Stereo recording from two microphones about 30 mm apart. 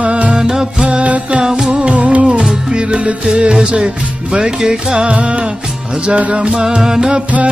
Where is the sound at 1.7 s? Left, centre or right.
Right.